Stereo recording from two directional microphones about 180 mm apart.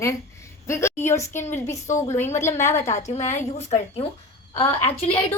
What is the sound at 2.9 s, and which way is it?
A woman's voice, 40° left (ahead or behind).